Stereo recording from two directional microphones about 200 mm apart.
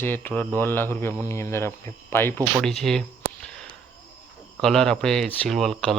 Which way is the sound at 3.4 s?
5° left (ahead or behind).